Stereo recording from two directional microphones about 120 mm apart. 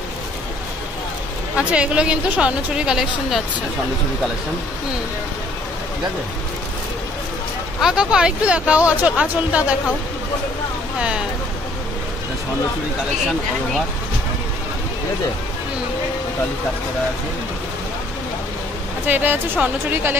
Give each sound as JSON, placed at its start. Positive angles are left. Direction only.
{"t": 1.6, "sound": "a woman's voice", "side_deg": -10}
{"t": 7.8, "sound": "a woman's voice", "side_deg": -5}
{"t": 11.0, "sound": "a woman's voice", "side_deg": -10}
{"t": 19.0, "sound": "a woman's voice", "side_deg": -15}